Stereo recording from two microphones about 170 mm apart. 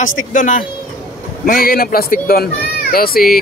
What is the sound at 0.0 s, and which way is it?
Speech, 50° left (ahead or behind).